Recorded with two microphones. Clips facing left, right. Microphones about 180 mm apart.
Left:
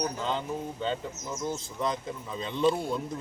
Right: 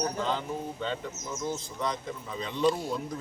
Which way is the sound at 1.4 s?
Centre (ahead or behind).